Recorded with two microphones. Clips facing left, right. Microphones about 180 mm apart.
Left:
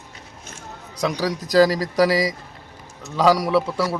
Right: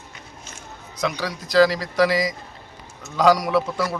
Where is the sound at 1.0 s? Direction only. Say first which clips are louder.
Left 3 dB; 40° left (ahead or behind).